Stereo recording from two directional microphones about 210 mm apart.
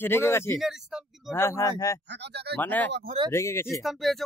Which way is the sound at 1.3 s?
15° left (ahead or behind).